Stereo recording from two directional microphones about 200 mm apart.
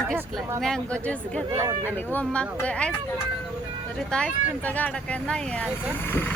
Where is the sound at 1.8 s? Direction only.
10° left (ahead or behind).